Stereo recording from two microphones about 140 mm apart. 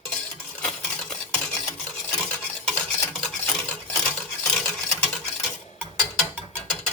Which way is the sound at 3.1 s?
5° left (ahead or behind).